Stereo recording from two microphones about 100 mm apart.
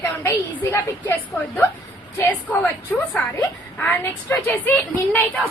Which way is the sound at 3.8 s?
15° left (ahead or behind).